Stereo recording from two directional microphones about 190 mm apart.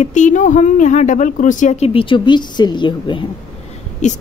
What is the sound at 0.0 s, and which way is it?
Speech, 40° left (ahead or behind).